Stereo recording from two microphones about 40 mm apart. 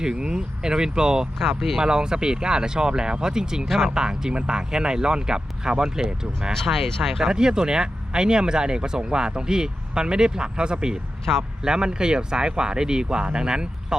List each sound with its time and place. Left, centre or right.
0.0 s speech: centre
1.4 s speech: centre
1.8 s speech: centre
6.5 s speech: centre
7.2 s speech: centre